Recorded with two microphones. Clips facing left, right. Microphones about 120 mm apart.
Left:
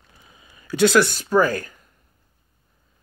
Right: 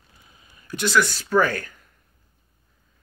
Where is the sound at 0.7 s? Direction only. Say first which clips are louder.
Left 5 dB; 90° left.